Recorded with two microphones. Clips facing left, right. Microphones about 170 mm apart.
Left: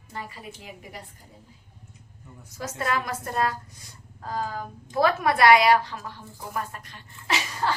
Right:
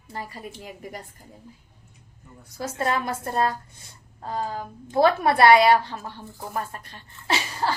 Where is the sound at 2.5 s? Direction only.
30° right (ahead or behind).